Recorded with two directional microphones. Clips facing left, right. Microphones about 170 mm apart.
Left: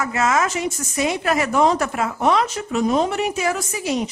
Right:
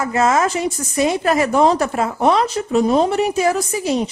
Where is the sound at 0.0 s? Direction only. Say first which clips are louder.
Right 4 dB; 30° right (ahead or behind).